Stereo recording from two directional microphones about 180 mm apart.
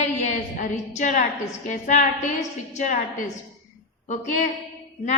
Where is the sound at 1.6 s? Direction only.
40° left (ahead or behind).